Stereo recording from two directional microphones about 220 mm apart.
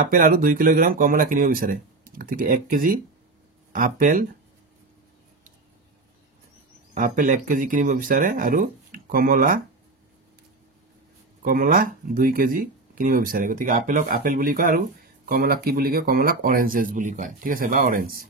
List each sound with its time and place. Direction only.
0.1 s speech: 40° right (ahead or behind)
6.9 s speech: 35° right (ahead or behind)
11.4 s speech: 40° right (ahead or behind)